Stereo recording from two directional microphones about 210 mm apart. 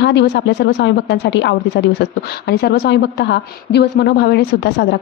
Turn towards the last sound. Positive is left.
turn(degrees=55)  # may be behind; listen again after turning